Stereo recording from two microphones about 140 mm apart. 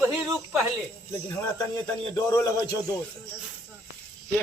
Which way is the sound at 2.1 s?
30° left (ahead or behind).